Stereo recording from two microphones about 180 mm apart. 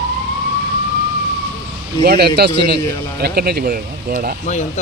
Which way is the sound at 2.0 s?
60° right (ahead or behind).